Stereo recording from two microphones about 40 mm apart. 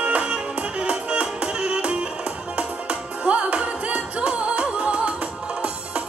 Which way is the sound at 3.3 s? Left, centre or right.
Right.